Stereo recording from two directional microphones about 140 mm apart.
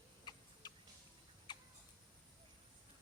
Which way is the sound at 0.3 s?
30° left (ahead or behind).